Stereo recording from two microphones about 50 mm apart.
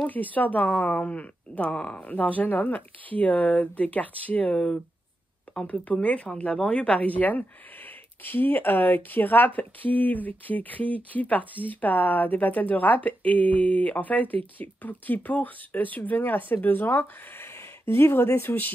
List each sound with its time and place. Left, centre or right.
0.0 s speech: left
17.8 s speech: left